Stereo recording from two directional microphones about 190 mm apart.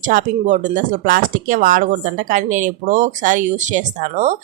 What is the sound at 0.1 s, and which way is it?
Speech, 45° right (ahead or behind).